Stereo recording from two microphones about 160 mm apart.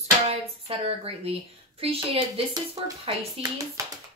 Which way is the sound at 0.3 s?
40° right (ahead or behind).